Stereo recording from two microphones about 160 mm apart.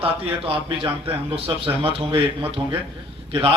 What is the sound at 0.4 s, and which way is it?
A man's voice, 35° right (ahead or behind).